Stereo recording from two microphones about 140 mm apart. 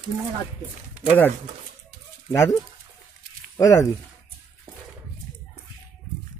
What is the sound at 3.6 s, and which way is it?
Speech, 25° left (ahead or behind).